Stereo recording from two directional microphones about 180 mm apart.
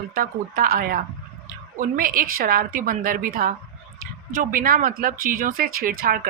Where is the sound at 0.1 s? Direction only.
50° right (ahead or behind).